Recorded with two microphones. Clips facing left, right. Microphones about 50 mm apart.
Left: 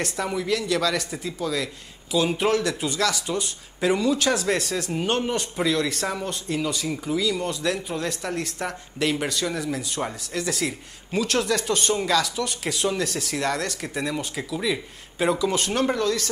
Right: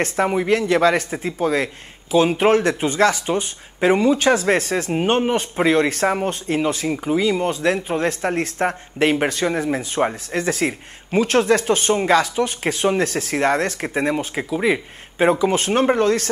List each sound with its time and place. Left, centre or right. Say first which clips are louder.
0.0 s speech: right 7 dB; right